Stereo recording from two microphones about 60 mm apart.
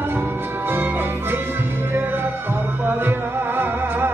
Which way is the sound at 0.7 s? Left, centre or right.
Right.